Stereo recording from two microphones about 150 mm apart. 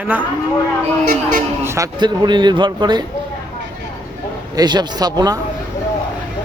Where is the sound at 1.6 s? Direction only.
20° right (ahead or behind).